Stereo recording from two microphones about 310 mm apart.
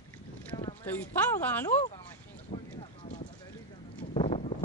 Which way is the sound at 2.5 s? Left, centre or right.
Centre.